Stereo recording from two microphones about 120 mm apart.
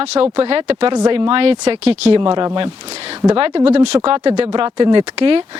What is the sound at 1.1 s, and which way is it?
Speech, 50° right (ahead or behind).